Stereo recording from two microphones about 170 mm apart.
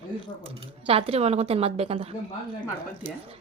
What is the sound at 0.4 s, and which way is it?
Speech, 35° right (ahead or behind).